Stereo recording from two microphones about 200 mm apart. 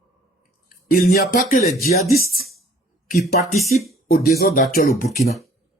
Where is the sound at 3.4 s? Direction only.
40° left (ahead or behind).